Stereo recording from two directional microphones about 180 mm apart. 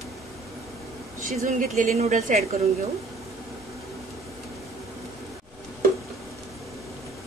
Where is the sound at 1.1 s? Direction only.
45° right (ahead or behind).